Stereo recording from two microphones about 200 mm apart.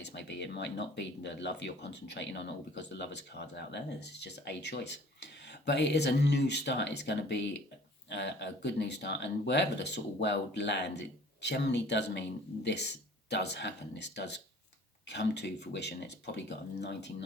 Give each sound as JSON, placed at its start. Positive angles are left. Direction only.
{"t": 0.0, "sound": "speech", "side_deg": 60}